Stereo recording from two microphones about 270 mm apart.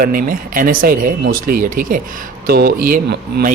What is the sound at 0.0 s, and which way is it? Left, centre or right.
Speech, right.